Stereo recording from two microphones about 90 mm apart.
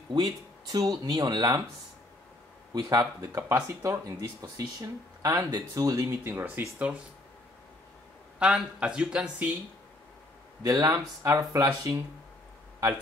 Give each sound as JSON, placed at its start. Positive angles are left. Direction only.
{"t": 0.1, "sound": "speech", "side_deg": -45}
{"t": 2.7, "sound": "speech", "side_deg": -50}
{"t": 6.0, "sound": "speech", "side_deg": -25}
{"t": 8.4, "sound": "speech", "side_deg": -10}
{"t": 10.6, "sound": "speech", "side_deg": -45}